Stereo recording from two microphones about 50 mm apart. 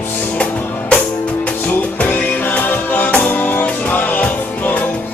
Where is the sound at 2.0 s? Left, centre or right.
Left.